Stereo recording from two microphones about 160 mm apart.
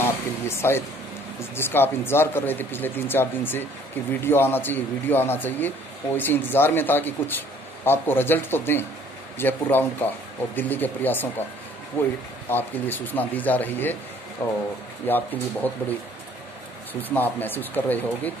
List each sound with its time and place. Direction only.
0.0 s a sound: 15° left (ahead or behind)
1.4 s speech: 15° left (ahead or behind)
17.1 s speech: 10° left (ahead or behind)